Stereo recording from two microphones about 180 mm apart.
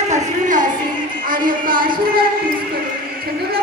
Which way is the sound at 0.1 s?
45° right (ahead or behind).